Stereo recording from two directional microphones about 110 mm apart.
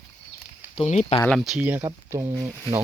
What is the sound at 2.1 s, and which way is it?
Speech, 25° right (ahead or behind).